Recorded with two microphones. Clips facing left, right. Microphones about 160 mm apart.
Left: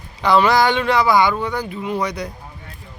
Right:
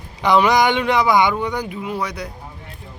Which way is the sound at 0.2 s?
20° right (ahead or behind).